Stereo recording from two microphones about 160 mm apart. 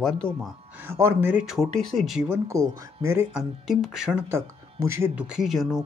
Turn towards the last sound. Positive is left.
turn(degrees=0)  # may be behind; listen again after turning